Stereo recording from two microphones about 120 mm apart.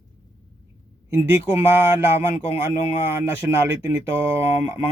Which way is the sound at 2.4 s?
50° left (ahead or behind).